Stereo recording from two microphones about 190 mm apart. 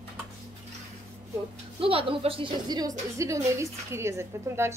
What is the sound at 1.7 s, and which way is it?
Speech, 30° right (ahead or behind).